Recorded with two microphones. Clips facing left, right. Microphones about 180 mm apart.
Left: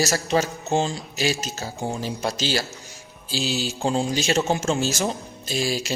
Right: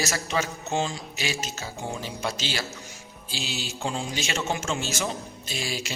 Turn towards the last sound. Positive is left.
turn(degrees=40)  # may be behind; listen again after turning